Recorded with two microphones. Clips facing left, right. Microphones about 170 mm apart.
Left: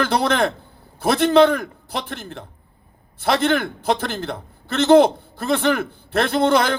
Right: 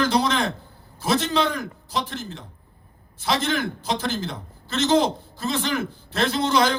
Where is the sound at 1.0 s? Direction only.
60° left (ahead or behind).